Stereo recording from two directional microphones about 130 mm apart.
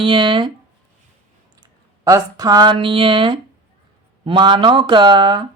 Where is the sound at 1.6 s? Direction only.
30° right (ahead or behind).